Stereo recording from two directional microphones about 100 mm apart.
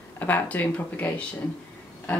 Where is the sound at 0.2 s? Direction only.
15° left (ahead or behind).